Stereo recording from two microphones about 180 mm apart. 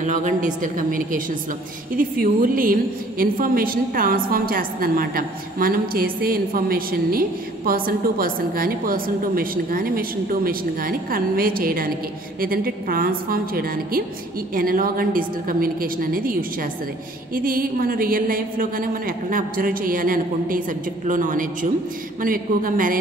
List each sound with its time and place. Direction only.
0.0 s a woman's voice: 45° right (ahead or behind)